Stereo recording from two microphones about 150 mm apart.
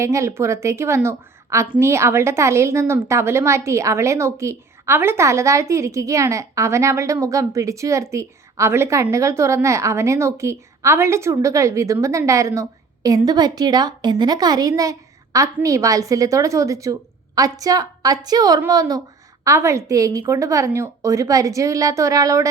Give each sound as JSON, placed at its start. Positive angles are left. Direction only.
{"t": 0.0, "sound": "a woman's voice", "side_deg": -20}